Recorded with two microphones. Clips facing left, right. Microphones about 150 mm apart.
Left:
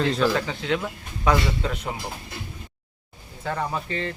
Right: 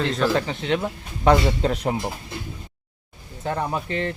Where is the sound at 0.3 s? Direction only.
20° right (ahead or behind); by 1.9 s 40° right (ahead or behind).